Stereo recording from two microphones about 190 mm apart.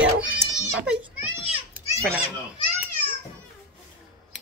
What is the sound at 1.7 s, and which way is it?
Children playing, 10° right (ahead or behind).